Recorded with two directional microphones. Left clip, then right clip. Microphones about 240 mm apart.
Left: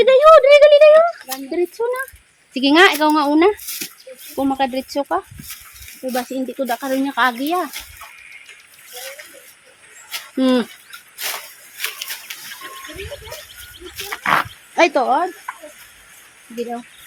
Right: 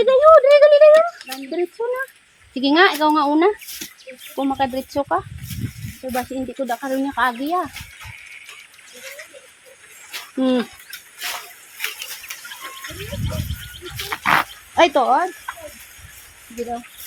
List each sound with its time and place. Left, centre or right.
0.0 s a sound: centre
1.5 s speech: centre
10.3 s speech: centre
11.8 s a sound: centre
13.9 s wild animals: centre
14.8 s speech: centre